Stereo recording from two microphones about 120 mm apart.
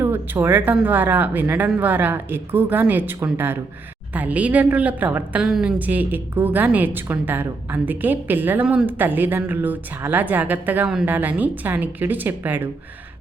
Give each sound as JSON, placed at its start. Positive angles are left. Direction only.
{"t": 0.0, "sound": "a woman's voice", "side_deg": -20}